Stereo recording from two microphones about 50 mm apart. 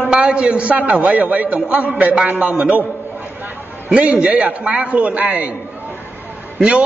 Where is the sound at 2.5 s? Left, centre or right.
Right.